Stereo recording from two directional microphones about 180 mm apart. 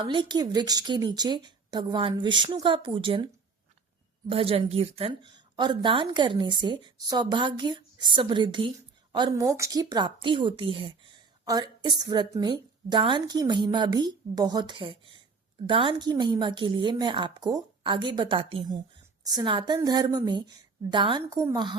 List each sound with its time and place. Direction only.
0.0 s a woman's voice: 25° right (ahead or behind)
4.3 s a woman's voice: 30° right (ahead or behind)